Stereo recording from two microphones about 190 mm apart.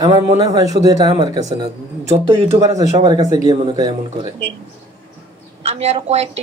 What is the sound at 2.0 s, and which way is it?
Speech, 35° right (ahead or behind).